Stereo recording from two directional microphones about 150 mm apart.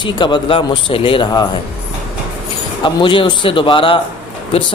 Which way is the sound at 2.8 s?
35° left (ahead or behind).